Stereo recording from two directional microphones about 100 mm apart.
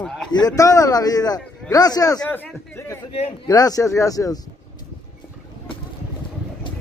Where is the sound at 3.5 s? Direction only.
40° left (ahead or behind).